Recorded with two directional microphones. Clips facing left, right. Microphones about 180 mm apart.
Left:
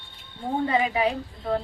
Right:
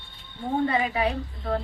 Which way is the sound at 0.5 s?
20° left (ahead or behind).